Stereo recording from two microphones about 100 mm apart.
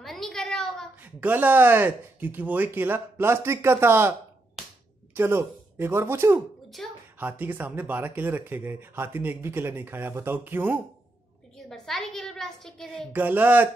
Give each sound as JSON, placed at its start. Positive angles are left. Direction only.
{"t": 0.0, "sound": "a sound", "side_deg": 5}
{"t": 1.0, "sound": "speech", "side_deg": -15}
{"t": 5.1, "sound": "speech", "side_deg": -25}
{"t": 6.8, "sound": "a woman's voice", "side_deg": 5}
{"t": 7.2, "sound": "speech", "side_deg": -20}
{"t": 11.5, "sound": "a woman's voice", "side_deg": 5}
{"t": 13.1, "sound": "speech", "side_deg": -15}